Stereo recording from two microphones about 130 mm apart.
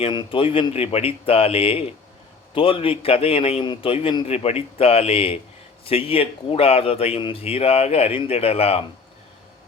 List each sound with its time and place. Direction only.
0.0 s speech: 40° left (ahead or behind)
4.3 s speech: 50° left (ahead or behind)